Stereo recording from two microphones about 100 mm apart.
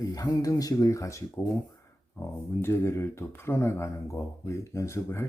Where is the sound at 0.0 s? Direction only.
40° left (ahead or behind).